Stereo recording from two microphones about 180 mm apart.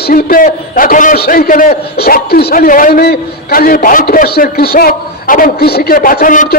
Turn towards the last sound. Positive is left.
turn(degrees=45)  # may be behind; listen again after turning